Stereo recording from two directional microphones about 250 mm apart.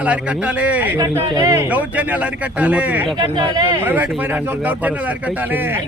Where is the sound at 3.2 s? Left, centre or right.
Centre.